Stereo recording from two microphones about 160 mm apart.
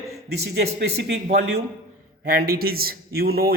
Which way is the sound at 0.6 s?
90° right.